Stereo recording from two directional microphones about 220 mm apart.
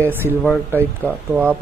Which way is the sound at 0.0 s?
10° right (ahead or behind).